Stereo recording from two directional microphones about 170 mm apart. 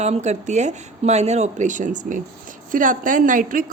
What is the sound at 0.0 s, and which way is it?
A woman's voice, 40° right (ahead or behind).